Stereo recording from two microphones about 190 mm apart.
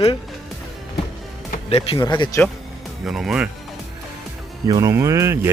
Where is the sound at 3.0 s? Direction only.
Centre (ahead or behind).